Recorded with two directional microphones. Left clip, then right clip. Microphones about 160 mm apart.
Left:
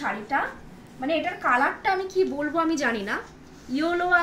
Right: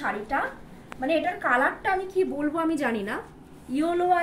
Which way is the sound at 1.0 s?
15° right (ahead or behind).